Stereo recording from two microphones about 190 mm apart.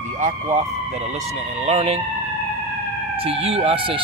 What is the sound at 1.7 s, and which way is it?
Speech, 30° right (ahead or behind).